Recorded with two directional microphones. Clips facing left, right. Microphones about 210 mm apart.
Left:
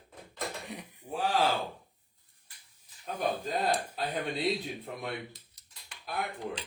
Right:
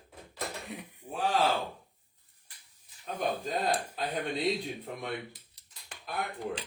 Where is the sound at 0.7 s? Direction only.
Centre (ahead or behind).